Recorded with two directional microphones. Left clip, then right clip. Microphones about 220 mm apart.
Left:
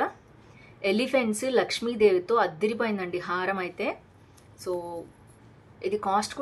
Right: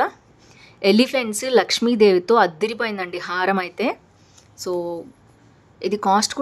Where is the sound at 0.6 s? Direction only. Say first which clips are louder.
Right 9 dB; 50° right (ahead or behind).